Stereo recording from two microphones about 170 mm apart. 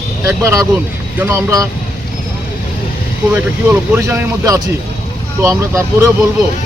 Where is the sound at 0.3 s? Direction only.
20° right (ahead or behind).